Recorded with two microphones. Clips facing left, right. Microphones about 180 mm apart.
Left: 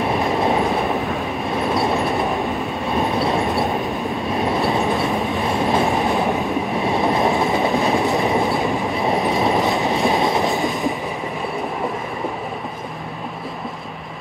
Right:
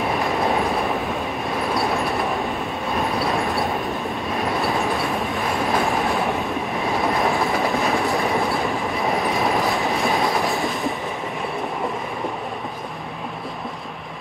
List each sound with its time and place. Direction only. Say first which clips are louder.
0.1 s train: left 3 dB; centre (ahead or behind)
5.6 s train: left 3 dB; 25° left (ahead or behind)
6.8 s train: left 3 dB; centre (ahead or behind)
7.2 s train: left 3 dB; 20° left (ahead or behind)
7.6 s train: left 3 dB; centre (ahead or behind)
8.1 s train: left 3 dB; 20° left (ahead or behind)
8.5 s train: left 3 dB; centre (ahead or behind)